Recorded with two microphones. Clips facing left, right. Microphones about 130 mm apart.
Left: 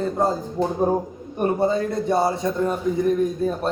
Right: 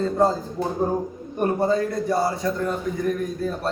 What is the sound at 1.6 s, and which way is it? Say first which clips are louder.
Speech: even; 25° left (ahead or behind).